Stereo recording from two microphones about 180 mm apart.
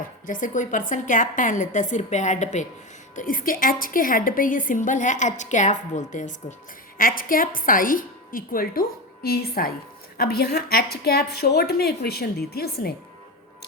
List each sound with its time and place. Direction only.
0.3 s a woman's voice: 45° left (ahead or behind)